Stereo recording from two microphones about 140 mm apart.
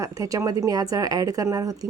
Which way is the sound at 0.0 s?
25° right (ahead or behind).